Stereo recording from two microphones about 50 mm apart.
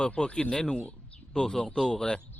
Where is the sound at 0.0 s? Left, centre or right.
Left.